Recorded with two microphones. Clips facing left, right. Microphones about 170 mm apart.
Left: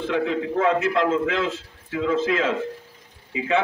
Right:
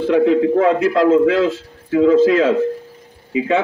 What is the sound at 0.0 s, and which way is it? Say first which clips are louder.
A man's voice: right 10 dB; 35° right (ahead or behind).